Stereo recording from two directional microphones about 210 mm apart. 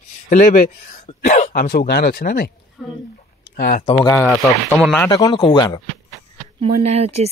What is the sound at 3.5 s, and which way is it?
Speech, 45° left (ahead or behind).